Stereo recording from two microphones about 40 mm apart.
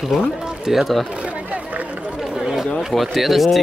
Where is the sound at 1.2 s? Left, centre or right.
Right.